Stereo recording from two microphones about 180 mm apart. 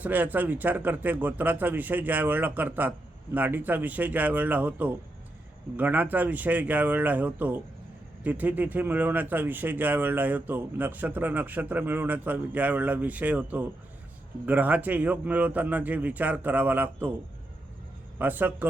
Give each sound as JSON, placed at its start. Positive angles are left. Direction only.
{"t": 0.0, "sound": "speech", "side_deg": -10}
{"t": 18.2, "sound": "speech", "side_deg": -10}